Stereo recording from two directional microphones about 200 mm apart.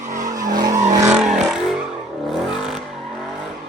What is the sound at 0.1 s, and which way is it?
Vehicle, 40° right (ahead or behind).